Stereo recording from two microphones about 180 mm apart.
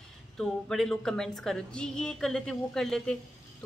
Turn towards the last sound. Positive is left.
turn(degrees=5)  # may be behind; listen again after turning